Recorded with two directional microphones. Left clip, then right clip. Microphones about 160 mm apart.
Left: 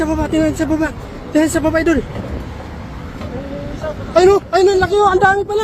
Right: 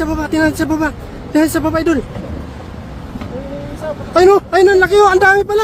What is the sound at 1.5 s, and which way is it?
Speech, 15° right (ahead or behind).